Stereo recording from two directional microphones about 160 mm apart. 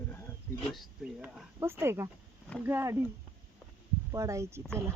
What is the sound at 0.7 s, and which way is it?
Speech, centre (ahead or behind).